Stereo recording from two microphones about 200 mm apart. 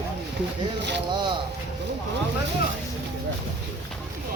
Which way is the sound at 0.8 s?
60° right (ahead or behind).